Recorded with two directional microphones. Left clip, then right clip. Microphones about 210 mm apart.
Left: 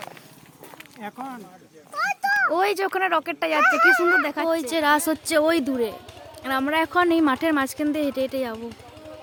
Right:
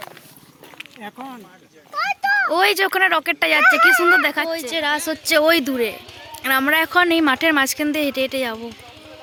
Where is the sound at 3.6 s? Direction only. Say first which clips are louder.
Right 3 dB; 30° right (ahead or behind).